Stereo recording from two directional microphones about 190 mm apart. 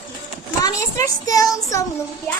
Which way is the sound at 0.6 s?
20° left (ahead or behind).